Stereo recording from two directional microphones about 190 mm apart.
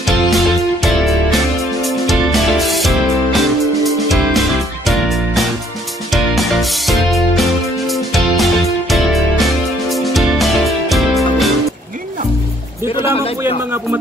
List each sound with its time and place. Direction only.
0.0 s music: centre (ahead or behind)
12.9 s music: 30° left (ahead or behind)